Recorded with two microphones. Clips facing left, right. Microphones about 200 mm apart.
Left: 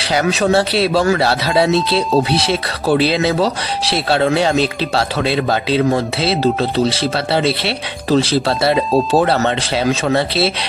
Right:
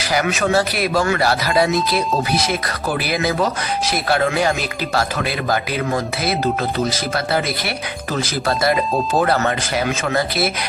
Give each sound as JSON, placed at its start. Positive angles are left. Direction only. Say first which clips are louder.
{"t": 0.1, "sound": "speech", "louder": "left 3 dB", "side_deg": 30}